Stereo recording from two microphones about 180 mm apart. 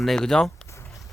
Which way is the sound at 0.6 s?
15° left (ahead or behind).